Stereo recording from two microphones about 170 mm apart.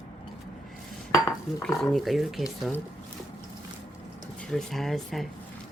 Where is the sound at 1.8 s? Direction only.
Centre (ahead or behind).